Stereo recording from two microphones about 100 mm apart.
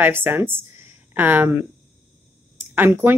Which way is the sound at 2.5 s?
20° right (ahead or behind).